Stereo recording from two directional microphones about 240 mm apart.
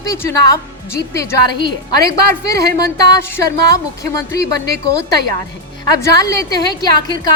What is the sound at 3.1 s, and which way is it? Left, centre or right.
Speech, centre.